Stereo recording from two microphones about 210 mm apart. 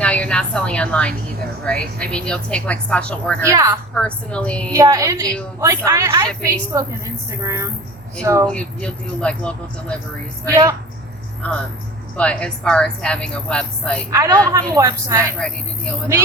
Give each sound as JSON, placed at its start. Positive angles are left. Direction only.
{"t": 0.0, "sound": "a woman's voice", "side_deg": 5}
{"t": 3.4, "sound": "a woman's voice", "side_deg": -15}
{"t": 3.9, "sound": "a woman's voice", "side_deg": 5}
{"t": 4.7, "sound": "a woman's voice", "side_deg": -15}
{"t": 8.4, "sound": "a woman's voice", "side_deg": 5}
{"t": 10.4, "sound": "a woman's voice", "side_deg": -15}
{"t": 12.1, "sound": "a woman's voice", "side_deg": 5}
{"t": 14.1, "sound": "a woman's voice", "side_deg": -15}
{"t": 15.4, "sound": "a woman's voice", "side_deg": 5}